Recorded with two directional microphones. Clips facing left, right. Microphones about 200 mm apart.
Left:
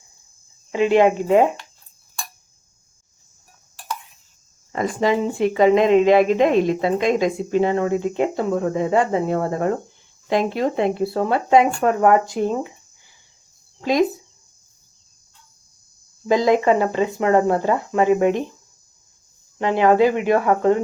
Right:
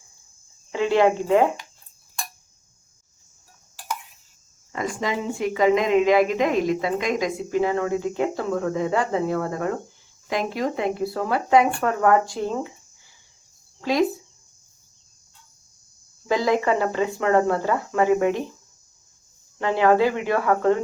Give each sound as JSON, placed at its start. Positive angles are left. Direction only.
{"t": 0.7, "sound": "speech", "side_deg": 15}
{"t": 4.7, "sound": "speech", "side_deg": 35}
{"t": 16.2, "sound": "speech", "side_deg": 20}
{"t": 19.5, "sound": "speech", "side_deg": 20}